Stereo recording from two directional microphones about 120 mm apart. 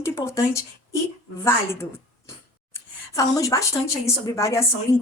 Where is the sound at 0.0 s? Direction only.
25° left (ahead or behind).